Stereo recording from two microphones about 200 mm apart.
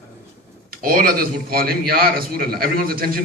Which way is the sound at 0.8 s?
45° right (ahead or behind).